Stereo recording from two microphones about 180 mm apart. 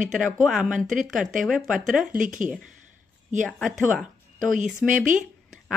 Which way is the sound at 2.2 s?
45° right (ahead or behind).